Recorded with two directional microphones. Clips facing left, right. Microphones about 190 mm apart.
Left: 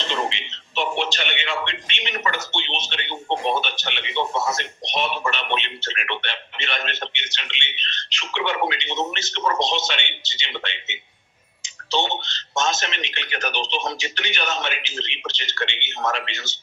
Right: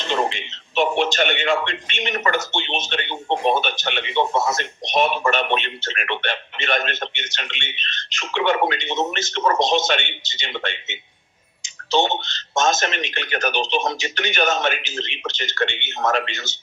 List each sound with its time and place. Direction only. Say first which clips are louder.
0.1 s a man's voice: right 7 dB; 45° right (ahead or behind)